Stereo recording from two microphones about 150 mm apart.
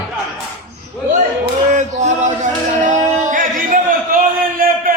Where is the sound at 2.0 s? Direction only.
55° right (ahead or behind).